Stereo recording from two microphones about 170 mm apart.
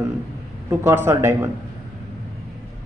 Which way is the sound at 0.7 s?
15° right (ahead or behind).